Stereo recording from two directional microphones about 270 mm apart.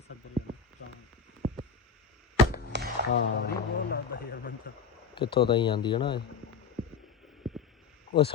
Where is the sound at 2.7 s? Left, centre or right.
Right.